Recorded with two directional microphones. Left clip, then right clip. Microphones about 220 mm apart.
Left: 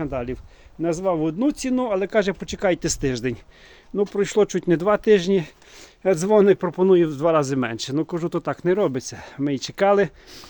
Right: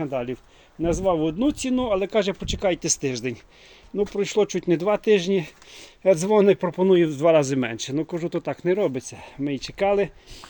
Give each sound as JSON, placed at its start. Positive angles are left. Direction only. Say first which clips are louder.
{"t": 0.0, "sound": "speech", "louder": "even", "side_deg": 0}